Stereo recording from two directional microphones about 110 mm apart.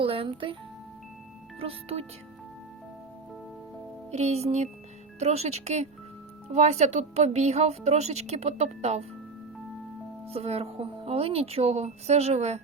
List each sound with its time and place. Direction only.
0.0 s speech: 55° right (ahead or behind)
1.5 s speech: 65° right (ahead or behind)
4.1 s speech: 80° right
10.2 s speech: 70° right (ahead or behind); by 12.6 s 90° right